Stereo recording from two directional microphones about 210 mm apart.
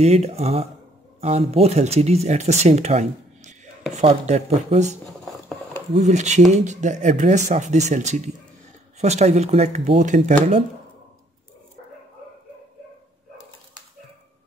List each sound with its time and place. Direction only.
0.0 s speech: 30° right (ahead or behind)
5.0 s a sound: centre (ahead or behind)
5.9 s speech: 35° right (ahead or behind)